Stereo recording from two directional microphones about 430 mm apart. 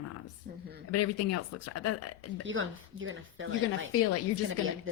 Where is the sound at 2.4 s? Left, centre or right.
Right.